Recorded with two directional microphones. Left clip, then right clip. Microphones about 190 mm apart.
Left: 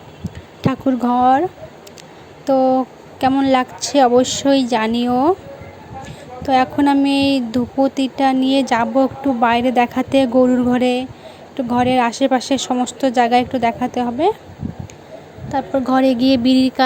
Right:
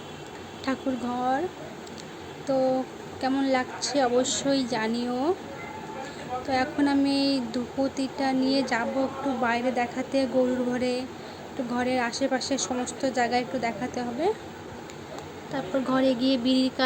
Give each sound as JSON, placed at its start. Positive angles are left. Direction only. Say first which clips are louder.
{"t": 0.6, "sound": "speech", "louder": "left 11 dB", "side_deg": 40}
{"t": 2.5, "sound": "speech", "louder": "left 10 dB", "side_deg": 45}
{"t": 6.4, "sound": "speech", "louder": "left 12 dB", "side_deg": 40}
{"t": 15.5, "sound": "speech", "louder": "left 10 dB", "side_deg": 35}